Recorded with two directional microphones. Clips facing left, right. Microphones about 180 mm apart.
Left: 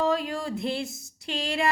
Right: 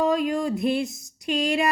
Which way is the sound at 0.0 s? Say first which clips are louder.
Right 4 dB; 20° right (ahead or behind).